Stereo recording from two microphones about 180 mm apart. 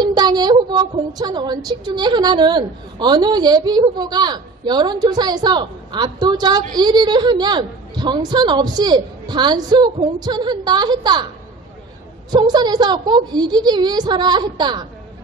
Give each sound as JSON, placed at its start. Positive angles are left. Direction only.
{"t": 0.0, "sound": "speech", "side_deg": -20}
{"t": 12.3, "sound": "speech", "side_deg": -20}